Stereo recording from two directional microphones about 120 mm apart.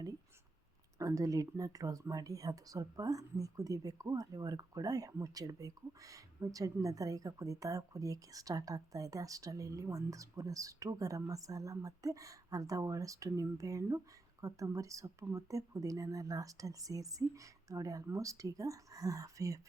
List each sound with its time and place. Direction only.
0.9 s speech: 30° right (ahead or behind)